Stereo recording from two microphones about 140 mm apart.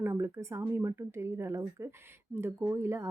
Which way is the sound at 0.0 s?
20° right (ahead or behind).